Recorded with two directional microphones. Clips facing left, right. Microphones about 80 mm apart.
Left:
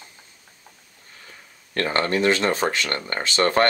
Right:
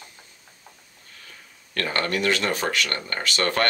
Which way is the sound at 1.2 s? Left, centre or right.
Left.